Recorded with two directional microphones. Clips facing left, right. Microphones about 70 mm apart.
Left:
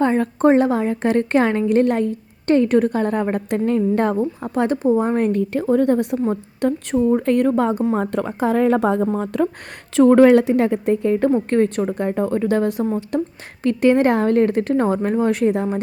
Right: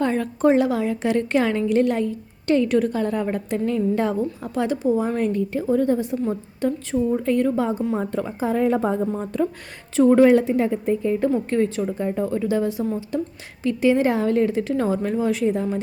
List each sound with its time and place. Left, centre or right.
0.0 s a woman's voice: left